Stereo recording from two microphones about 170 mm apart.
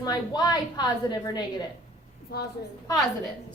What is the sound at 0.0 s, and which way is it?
A woman's voice, 20° left (ahead or behind).